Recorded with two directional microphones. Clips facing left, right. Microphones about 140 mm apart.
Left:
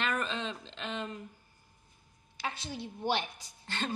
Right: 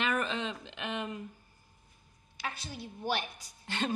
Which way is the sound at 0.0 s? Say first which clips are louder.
Right 2 dB; 10° right (ahead or behind).